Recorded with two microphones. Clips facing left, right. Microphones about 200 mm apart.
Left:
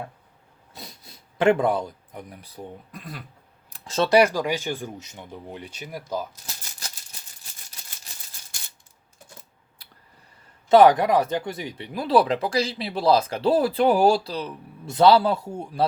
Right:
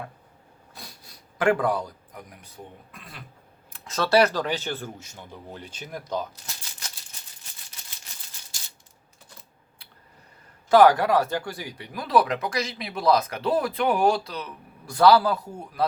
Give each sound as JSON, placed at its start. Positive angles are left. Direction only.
{"t": 0.7, "sound": "a sound", "side_deg": 20}
{"t": 2.9, "sound": "speech", "side_deg": 40}
{"t": 3.7, "sound": "a sound", "side_deg": 30}
{"t": 4.1, "sound": "speech", "side_deg": 10}
{"t": 8.5, "sound": "coin", "side_deg": 60}
{"t": 10.7, "sound": "speech", "side_deg": 20}